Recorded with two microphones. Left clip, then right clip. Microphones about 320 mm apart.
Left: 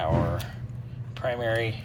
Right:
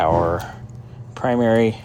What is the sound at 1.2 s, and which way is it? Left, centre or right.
Speech, right.